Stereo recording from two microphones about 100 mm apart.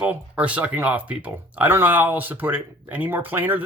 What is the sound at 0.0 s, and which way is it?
Speech, 15° right (ahead or behind).